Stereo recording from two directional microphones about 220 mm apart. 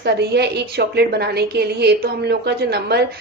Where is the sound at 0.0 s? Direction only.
50° right (ahead or behind).